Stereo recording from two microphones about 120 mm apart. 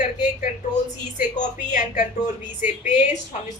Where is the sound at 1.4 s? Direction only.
90° left.